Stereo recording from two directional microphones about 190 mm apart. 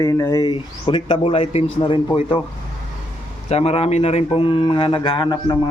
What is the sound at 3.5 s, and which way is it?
A man's voice, 35° left (ahead or behind).